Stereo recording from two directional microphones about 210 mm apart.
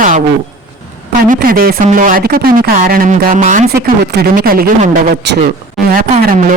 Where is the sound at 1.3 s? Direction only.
45° right (ahead or behind).